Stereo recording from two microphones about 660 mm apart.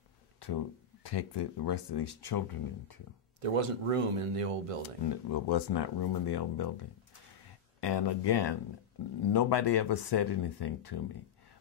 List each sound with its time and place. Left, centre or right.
1.0 s speech: left
3.3 s speech: right
5.0 s speech: left
7.8 s speech: left